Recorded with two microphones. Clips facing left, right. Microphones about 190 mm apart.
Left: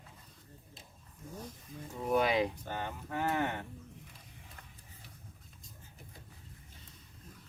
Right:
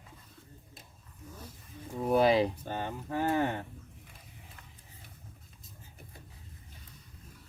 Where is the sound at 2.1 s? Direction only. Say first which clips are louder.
Right 5 dB; 30° right (ahead or behind).